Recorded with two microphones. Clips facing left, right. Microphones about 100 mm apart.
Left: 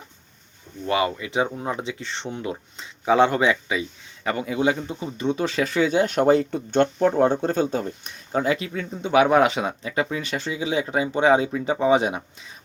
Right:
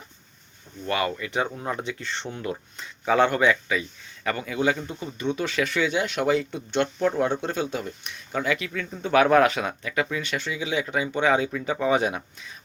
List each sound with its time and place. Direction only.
0.9 s speech: 25° left (ahead or behind)